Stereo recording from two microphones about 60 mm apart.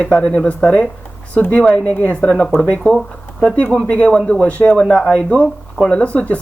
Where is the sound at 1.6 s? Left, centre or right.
Centre.